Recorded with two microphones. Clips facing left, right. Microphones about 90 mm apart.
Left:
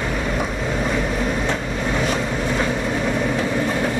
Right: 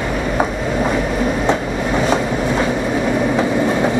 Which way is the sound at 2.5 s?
5° right (ahead or behind).